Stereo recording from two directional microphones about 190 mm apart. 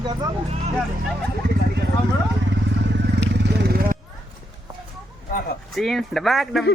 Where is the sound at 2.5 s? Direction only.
65° right (ahead or behind).